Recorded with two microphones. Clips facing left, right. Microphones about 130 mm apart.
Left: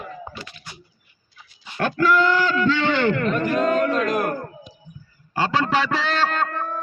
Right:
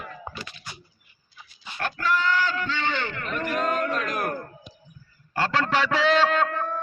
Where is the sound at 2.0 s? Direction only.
90° left; by 3.2 s 70° left (ahead or behind).